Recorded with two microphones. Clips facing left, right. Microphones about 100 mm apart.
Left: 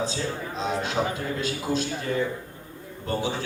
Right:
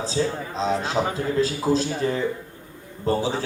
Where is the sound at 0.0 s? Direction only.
30° right (ahead or behind).